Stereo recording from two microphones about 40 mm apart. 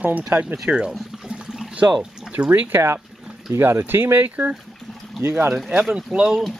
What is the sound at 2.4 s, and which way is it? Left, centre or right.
Speech, right.